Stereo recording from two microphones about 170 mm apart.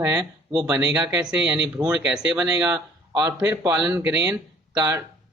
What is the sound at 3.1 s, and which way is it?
A man's voice, 20° right (ahead or behind).